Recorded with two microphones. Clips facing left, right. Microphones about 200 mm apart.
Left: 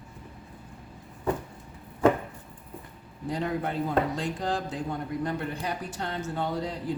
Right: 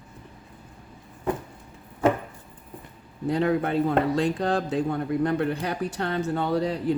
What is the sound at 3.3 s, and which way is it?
Speech, 65° right (ahead or behind).